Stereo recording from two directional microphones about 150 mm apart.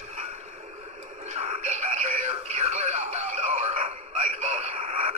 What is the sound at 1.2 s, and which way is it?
Music, 50° right (ahead or behind).